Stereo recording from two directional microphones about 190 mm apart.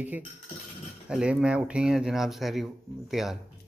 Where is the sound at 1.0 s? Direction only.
5° right (ahead or behind).